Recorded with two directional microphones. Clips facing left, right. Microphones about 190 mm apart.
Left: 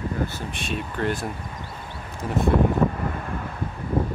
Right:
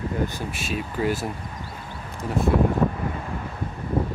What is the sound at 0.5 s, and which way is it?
Speech, 5° right (ahead or behind).